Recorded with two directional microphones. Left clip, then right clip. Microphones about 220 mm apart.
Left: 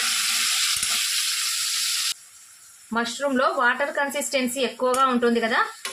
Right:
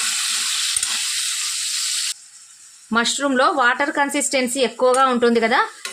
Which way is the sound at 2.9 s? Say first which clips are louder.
Right 6 dB; 50° right (ahead or behind).